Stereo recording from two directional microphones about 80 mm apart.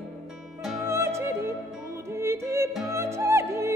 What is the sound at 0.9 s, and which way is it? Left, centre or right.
Music, right.